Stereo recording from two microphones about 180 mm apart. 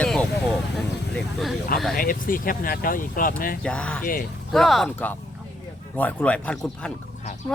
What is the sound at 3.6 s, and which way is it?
Speech, 5° left (ahead or behind).